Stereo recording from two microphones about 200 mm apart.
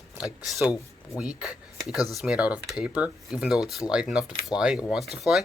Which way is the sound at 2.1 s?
5° right (ahead or behind).